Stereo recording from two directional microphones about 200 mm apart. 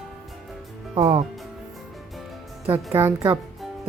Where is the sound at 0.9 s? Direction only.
25° right (ahead or behind).